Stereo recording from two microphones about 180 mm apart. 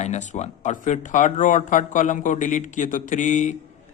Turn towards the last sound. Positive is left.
turn(degrees=40)  # may be behind; listen again after turning